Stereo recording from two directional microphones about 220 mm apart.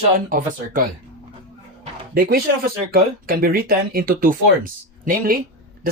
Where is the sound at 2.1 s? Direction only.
45° right (ahead or behind).